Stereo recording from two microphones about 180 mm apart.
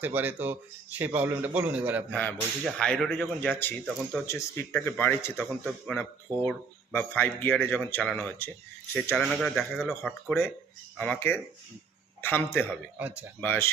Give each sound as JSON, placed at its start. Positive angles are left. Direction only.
{"t": 0.0, "sound": "a man's voice", "side_deg": -10}
{"t": 2.1, "sound": "speech", "side_deg": 5}
{"t": 13.0, "sound": "a man's voice", "side_deg": -10}
{"t": 13.4, "sound": "speech", "side_deg": 10}